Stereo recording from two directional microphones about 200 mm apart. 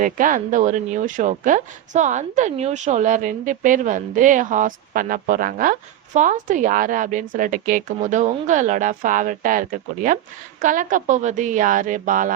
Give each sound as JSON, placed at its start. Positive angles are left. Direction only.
{"t": 0.0, "sound": "speech", "side_deg": -40}